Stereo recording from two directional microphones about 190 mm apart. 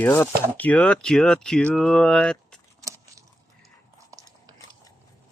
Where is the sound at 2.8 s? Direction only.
15° right (ahead or behind).